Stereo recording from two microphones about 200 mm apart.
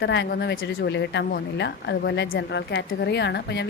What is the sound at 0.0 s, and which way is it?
A woman's voice, 60° left (ahead or behind).